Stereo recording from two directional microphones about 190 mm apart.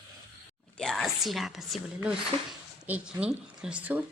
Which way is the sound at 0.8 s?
Centre (ahead or behind).